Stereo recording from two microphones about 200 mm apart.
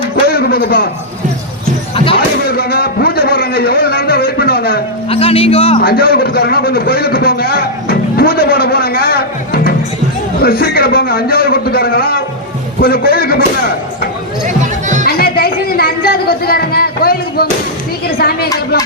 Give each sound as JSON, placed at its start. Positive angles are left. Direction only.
{"t": 0.2, "sound": "a sound", "side_deg": 50}
{"t": 2.1, "sound": "a man's voice", "side_deg": 50}
{"t": 5.0, "sound": "speech", "side_deg": 30}
{"t": 5.8, "sound": "a man's voice", "side_deg": 50}
{"t": 14.4, "sound": "run", "side_deg": -40}
{"t": 15.0, "sound": "a sound", "side_deg": 50}
{"t": 18.2, "sound": "a man's voice", "side_deg": 50}